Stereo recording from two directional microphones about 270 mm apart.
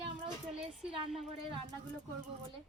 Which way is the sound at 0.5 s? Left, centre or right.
Centre.